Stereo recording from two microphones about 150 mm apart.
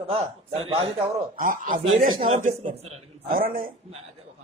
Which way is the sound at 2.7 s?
45° right (ahead or behind).